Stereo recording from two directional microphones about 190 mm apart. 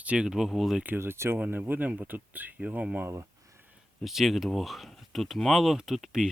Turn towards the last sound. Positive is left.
turn(degrees=0)  # may be behind; listen again after turning